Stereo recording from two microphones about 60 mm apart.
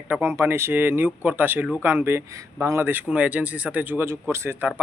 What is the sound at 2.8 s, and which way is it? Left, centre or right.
Speech, right.